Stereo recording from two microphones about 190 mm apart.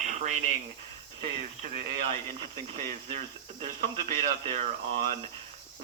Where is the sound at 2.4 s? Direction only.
35° right (ahead or behind).